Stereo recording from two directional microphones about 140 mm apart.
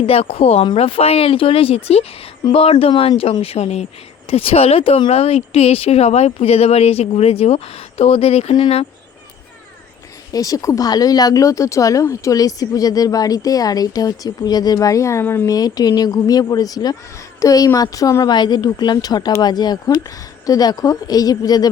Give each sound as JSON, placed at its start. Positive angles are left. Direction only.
{"t": 0.0, "sound": "speech", "side_deg": 45}
{"t": 10.3, "sound": "speech", "side_deg": 25}
{"t": 15.5, "sound": "speech", "side_deg": 25}